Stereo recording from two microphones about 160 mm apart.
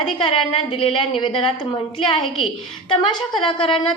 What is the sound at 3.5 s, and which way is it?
Speech, 30° left (ahead or behind).